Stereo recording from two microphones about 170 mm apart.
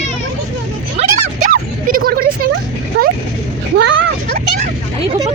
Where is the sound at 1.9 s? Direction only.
60° right (ahead or behind).